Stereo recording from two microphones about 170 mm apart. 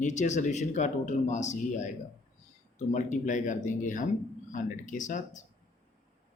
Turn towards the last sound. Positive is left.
turn(degrees=45)  # may be behind; listen again after turning